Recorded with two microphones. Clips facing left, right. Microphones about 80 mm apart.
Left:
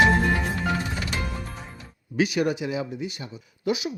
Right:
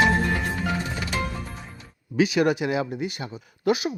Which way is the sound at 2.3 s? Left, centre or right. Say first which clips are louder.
Right 3 dB; right.